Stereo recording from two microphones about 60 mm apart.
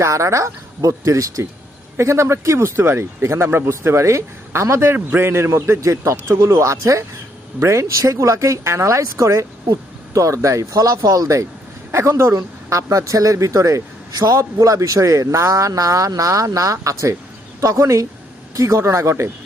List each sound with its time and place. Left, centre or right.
0.0 s speech: right
2.0 s speech: right
7.6 s speech: right